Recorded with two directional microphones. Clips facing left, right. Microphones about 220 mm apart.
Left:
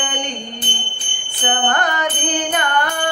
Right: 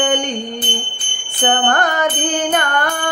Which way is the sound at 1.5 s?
45° right (ahead or behind).